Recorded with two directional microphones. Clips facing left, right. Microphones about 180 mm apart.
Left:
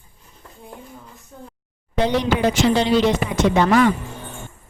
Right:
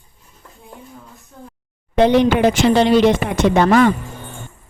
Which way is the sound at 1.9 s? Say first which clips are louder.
Right 6 dB; 60° right (ahead or behind).